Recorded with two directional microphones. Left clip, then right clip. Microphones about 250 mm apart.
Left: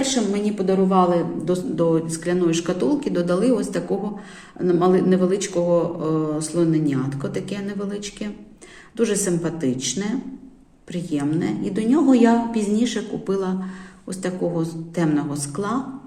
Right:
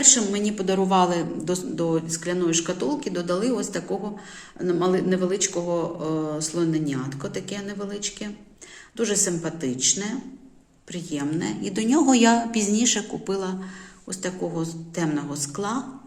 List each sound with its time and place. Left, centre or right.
0.0 s a woman's voice: centre
1.7 s a man's voice: centre